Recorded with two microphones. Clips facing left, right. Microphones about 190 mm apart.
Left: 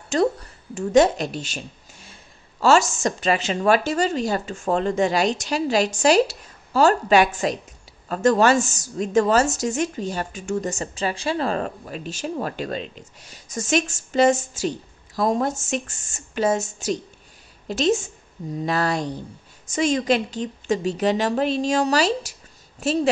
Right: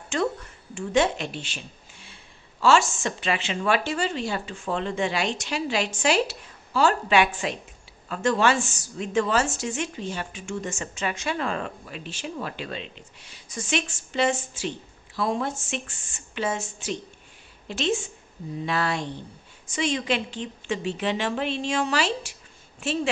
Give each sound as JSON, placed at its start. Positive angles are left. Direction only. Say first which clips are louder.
{"t": 0.1, "sound": "a woman's voice", "louder": "left 6 dB", "side_deg": 35}